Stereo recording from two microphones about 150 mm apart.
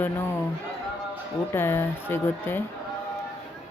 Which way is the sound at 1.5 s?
15° left (ahead or behind).